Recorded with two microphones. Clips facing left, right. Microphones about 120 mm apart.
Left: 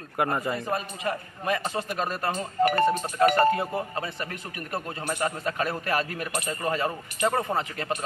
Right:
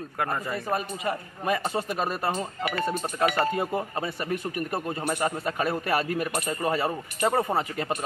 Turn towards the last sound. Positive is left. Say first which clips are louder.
# right 1 dB
turn(degrees=-10)  # may be behind; listen again after turning